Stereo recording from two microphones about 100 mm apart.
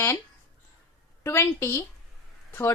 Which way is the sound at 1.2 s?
25° left (ahead or behind).